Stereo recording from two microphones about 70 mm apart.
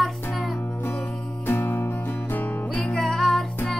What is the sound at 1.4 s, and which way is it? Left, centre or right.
Music, left.